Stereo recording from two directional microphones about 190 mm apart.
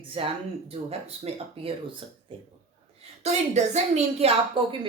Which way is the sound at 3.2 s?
35° right (ahead or behind).